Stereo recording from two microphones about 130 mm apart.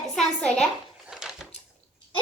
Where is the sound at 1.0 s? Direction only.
5° right (ahead or behind).